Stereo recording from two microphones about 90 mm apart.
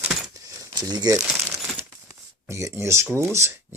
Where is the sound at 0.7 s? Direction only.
50° right (ahead or behind).